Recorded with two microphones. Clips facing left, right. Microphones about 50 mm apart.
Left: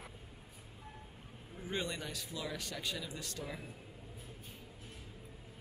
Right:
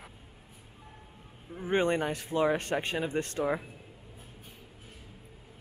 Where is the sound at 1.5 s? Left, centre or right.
Right.